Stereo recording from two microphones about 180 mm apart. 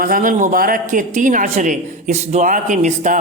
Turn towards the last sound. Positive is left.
turn(degrees=-45)  # may be behind; listen again after turning